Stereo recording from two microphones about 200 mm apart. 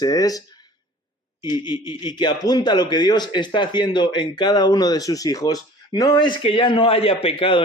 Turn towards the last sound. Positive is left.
turn(degrees=25)  # may be behind; listen again after turning